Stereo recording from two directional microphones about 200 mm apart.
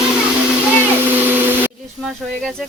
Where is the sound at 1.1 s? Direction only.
10° right (ahead or behind).